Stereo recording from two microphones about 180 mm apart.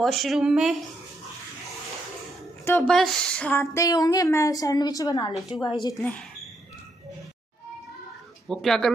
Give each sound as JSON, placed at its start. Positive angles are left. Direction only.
{"t": 0.0, "sound": "speech", "side_deg": 0}
{"t": 2.6, "sound": "a woman's voice", "side_deg": 5}
{"t": 5.9, "sound": "a woman's voice", "side_deg": 5}
{"t": 8.5, "sound": "speech", "side_deg": 0}